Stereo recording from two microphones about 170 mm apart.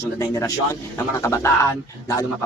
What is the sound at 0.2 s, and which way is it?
A man's voice, 20° left (ahead or behind).